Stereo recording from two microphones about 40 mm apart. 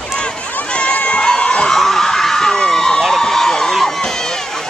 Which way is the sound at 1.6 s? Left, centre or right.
Centre.